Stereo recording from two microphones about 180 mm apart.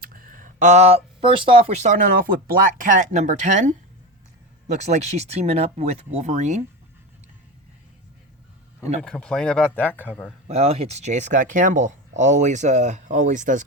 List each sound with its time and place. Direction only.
0.0 s speech: 50° right (ahead or behind)
9.0 s speech: 5° left (ahead or behind)
10.5 s speech: 35° right (ahead or behind)